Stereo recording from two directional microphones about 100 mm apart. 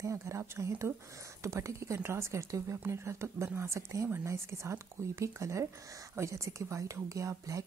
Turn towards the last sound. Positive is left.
turn(degrees=-30)  # may be behind; listen again after turning